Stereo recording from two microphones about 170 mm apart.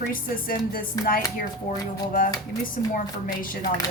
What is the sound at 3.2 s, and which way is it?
Speech, 55° left (ahead or behind).